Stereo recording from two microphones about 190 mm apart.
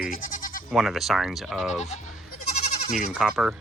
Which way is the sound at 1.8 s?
35° left (ahead or behind).